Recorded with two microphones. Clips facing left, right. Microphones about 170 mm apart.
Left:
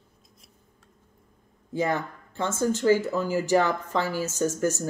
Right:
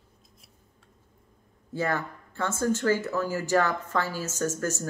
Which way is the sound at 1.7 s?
15° left (ahead or behind).